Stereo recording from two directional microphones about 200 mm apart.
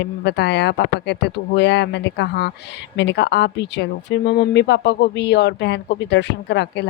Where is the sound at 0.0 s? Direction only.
60° left (ahead or behind).